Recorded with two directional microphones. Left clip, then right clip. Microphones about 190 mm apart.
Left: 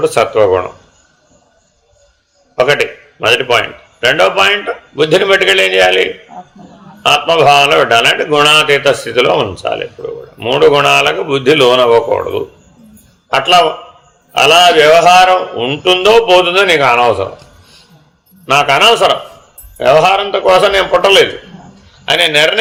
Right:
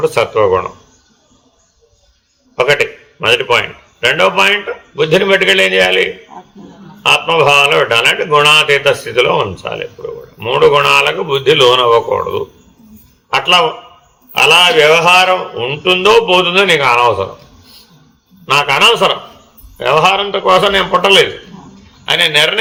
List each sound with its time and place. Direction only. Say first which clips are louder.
0.0 s a man's voice: left 2 dB; 50° left (ahead or behind)
2.6 s a man's voice: left 1 dB; 50° left (ahead or behind)
18.4 s a man's voice: left 1 dB; 50° left (ahead or behind)